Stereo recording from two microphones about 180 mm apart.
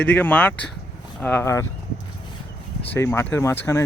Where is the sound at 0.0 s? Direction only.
10° left (ahead or behind).